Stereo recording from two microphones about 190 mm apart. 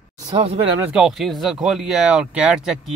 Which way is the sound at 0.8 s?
5° right (ahead or behind).